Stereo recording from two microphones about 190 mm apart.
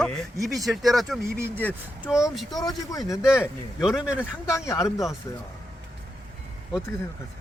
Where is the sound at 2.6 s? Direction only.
20° left (ahead or behind).